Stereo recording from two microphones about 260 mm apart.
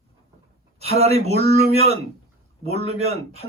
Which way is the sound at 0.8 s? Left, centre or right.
Right.